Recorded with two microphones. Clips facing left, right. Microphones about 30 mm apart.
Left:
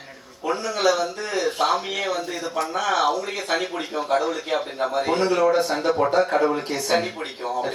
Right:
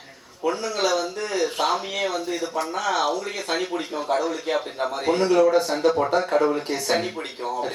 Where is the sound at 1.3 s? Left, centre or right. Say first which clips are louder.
Left 1 dB; left.